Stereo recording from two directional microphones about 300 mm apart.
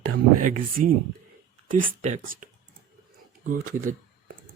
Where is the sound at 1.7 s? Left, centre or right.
Right.